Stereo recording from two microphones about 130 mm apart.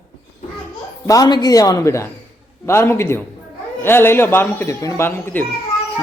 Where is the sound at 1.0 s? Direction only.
30° left (ahead or behind).